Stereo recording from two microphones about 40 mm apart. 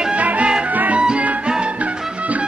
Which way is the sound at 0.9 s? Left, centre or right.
Right.